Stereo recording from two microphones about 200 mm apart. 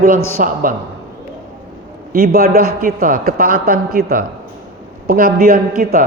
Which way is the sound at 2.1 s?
45° right (ahead or behind).